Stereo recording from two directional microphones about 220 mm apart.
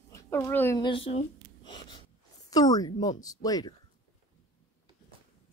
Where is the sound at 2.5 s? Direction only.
15° left (ahead or behind).